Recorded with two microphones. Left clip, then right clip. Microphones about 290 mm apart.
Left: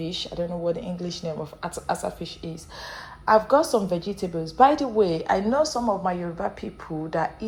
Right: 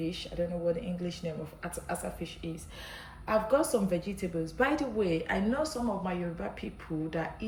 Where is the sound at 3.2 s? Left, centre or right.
Left.